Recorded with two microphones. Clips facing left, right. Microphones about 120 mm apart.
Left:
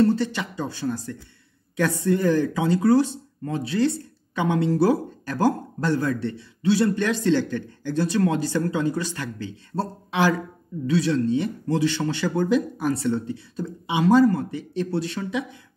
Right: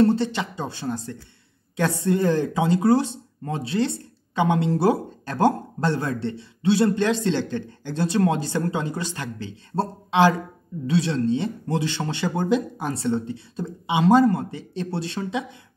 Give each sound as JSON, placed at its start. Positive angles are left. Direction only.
{"t": 0.0, "sound": "speech", "side_deg": -25}